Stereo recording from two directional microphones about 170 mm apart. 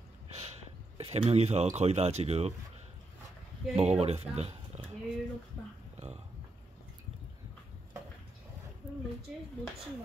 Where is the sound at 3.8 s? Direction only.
40° right (ahead or behind).